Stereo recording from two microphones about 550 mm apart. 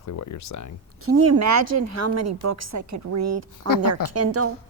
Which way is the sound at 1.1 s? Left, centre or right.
Right.